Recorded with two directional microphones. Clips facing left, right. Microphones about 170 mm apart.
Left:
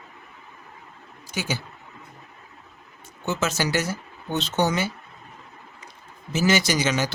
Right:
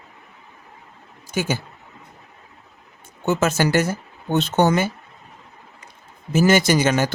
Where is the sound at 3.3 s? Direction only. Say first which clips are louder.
Right 6 dB; 50° right (ahead or behind).